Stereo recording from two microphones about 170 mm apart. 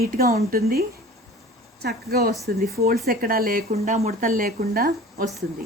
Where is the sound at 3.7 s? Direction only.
40° right (ahead or behind); by 5.2 s 60° right (ahead or behind).